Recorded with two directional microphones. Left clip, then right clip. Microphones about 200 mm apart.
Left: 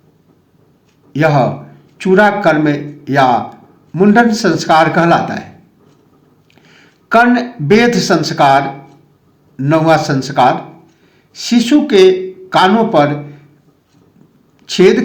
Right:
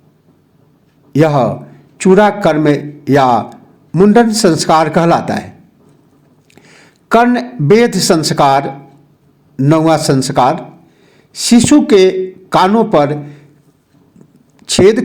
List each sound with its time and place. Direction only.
1.1 s a man's voice: 50° right (ahead or behind)
6.6 s a man's voice: 50° right (ahead or behind)
14.6 s speech: 50° right (ahead or behind)